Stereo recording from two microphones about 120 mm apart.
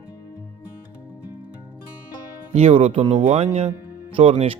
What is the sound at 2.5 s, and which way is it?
Speech, 55° right (ahead or behind).